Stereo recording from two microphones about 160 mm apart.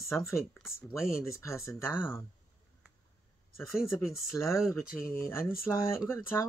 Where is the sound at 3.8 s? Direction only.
15° left (ahead or behind).